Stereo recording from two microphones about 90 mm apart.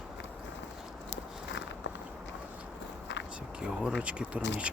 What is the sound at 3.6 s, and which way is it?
Speech, 10° right (ahead or behind).